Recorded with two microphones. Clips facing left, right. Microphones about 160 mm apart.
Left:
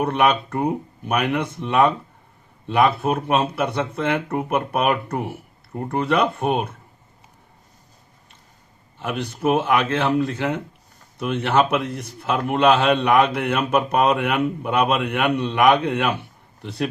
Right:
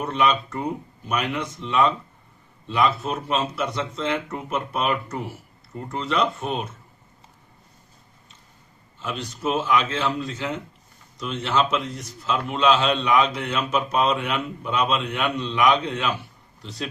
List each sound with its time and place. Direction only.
0.0 s a man's voice: 60° left (ahead or behind)
9.0 s a man's voice: 60° left (ahead or behind)